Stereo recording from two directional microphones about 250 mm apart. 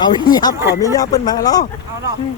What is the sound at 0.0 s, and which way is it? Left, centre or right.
Speech, centre.